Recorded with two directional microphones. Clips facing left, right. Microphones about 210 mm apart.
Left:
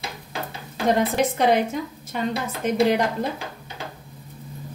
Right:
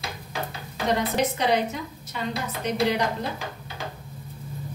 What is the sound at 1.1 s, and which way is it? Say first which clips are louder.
A woman's voice: left 3 dB; 50° left (ahead or behind).